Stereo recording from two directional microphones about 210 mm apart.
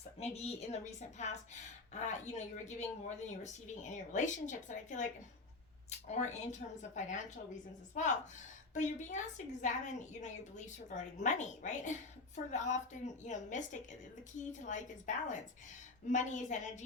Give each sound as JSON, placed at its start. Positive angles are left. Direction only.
{"t": 0.2, "sound": "a woman's voice", "side_deg": 30}
{"t": 6.1, "sound": "a woman's voice", "side_deg": 35}
{"t": 14.7, "sound": "a woman's voice", "side_deg": 35}